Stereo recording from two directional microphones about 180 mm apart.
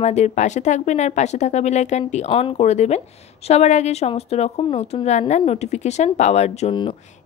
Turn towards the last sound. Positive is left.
turn(degrees=35)  # may be behind; listen again after turning